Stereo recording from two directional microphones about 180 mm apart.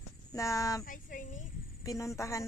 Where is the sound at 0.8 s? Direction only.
50° left (ahead or behind).